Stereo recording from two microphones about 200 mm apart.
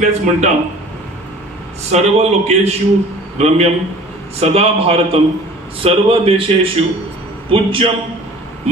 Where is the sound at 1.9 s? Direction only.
35° right (ahead or behind).